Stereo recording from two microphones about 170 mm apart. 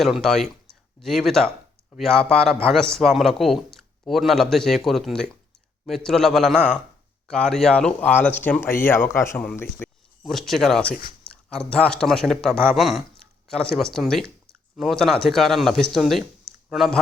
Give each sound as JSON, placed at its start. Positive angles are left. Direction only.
{"t": 0.0, "sound": "a man's voice", "side_deg": 0}